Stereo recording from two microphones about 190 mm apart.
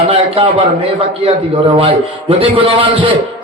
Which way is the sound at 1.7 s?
30° right (ahead or behind).